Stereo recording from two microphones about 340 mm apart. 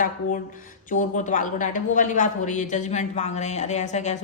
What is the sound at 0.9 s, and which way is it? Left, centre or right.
A woman's voice, left.